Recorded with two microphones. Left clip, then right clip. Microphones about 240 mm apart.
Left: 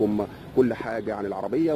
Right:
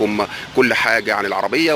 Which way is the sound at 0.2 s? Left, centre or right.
Centre.